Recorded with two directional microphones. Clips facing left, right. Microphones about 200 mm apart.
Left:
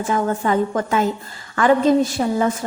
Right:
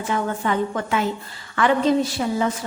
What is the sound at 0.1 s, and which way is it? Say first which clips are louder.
Speech: left 3 dB; 40° left (ahead or behind).